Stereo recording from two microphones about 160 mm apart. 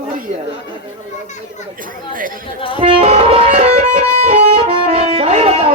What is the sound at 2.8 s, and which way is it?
Music, 35° right (ahead or behind).